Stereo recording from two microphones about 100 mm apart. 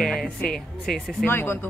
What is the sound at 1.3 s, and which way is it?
Speech, 25° left (ahead or behind).